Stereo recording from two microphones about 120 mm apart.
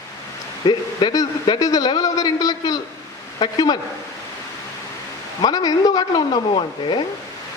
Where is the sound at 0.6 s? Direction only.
35° left (ahead or behind).